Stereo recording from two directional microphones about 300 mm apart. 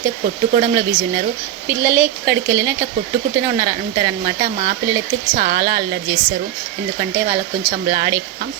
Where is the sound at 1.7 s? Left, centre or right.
Centre.